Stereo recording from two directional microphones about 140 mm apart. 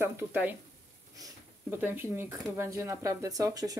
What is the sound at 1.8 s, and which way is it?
Speech, 15° right (ahead or behind).